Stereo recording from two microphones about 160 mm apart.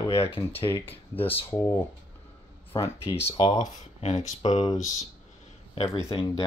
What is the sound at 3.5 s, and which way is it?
Speech, 45° left (ahead or behind).